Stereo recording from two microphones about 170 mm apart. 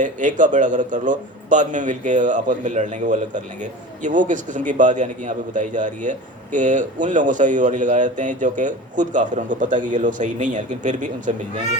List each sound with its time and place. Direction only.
0.0 s a man's voice: 50° right (ahead or behind)